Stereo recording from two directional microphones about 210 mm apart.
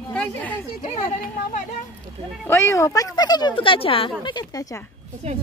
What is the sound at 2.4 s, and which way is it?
Speech, 10° left (ahead or behind).